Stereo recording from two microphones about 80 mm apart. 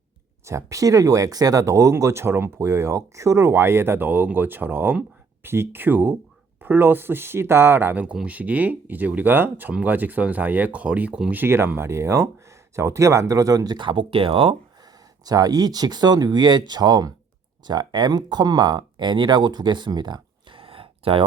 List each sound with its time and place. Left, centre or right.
0.4 s speech: right
8.0 s speech: centre
11.3 s speech: right
13.7 s speech: right
15.2 s speech: right